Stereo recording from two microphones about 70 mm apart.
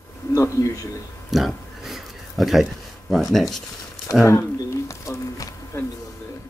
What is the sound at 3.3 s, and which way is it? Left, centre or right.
Speech, centre.